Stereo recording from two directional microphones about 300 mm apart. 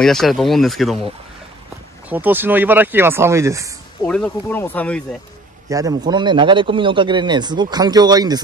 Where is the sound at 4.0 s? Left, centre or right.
Centre.